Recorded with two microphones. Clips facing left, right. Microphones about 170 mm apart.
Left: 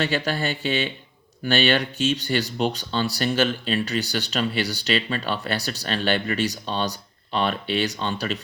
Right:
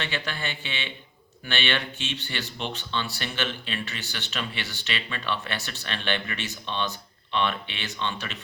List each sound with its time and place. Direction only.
0.0 s speech: 40° left (ahead or behind)